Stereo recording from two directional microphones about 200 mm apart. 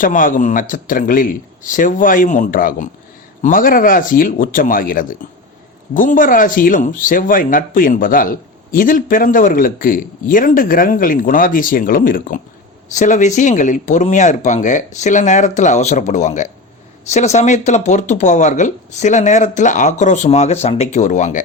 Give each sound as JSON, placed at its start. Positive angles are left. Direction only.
{"t": 0.0, "sound": "speech", "side_deg": 40}